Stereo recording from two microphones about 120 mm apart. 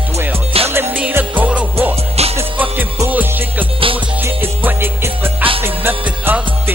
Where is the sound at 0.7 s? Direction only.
20° right (ahead or behind).